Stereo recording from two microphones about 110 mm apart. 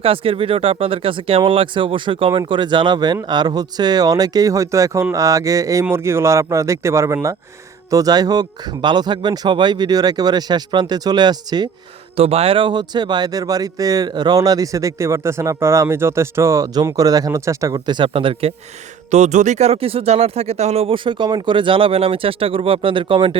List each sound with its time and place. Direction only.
0.0 s speech: 55° right (ahead or behind); by 11.7 s 40° right (ahead or behind)
12.1 s speech: 65° right (ahead or behind); by 17.7 s 30° right (ahead or behind)
17.7 s speech: 45° right (ahead or behind)
19.1 s speech: 90° right; by 20.9 s 75° right (ahead or behind)
20.9 s speech: 50° right (ahead or behind)